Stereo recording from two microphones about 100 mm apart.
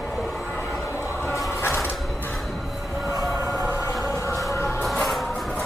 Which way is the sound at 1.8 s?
Centre (ahead or behind).